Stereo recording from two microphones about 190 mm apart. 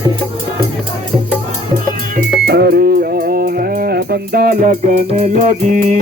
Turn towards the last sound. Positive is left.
turn(degrees=-45)  # may be behind; listen again after turning